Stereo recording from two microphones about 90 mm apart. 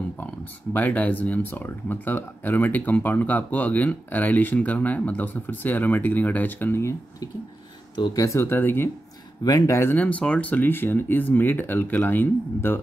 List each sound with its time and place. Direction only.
0.2 s speech: 20° left (ahead or behind)
8.1 s speech: 40° left (ahead or behind)
9.4 s speech: 45° left (ahead or behind)
9.9 s speech: 15° left (ahead or behind)